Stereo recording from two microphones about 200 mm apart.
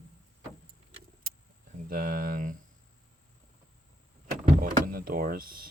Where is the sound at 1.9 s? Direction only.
45° right (ahead or behind).